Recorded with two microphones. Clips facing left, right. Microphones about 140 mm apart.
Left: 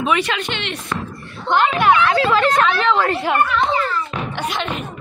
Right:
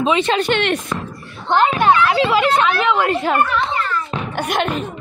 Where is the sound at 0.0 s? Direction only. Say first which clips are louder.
Right 3 dB; 25° right (ahead or behind).